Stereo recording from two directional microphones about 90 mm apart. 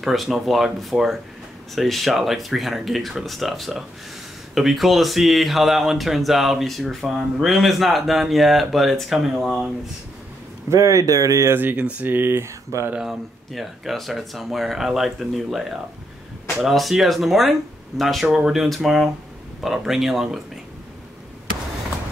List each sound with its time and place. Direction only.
0.0 s speech: centre (ahead or behind)
10.7 s speech: 35° right (ahead or behind)
12.9 s speech: 5° right (ahead or behind)